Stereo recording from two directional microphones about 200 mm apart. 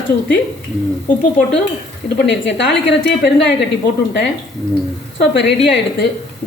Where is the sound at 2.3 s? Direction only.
60° left (ahead or behind).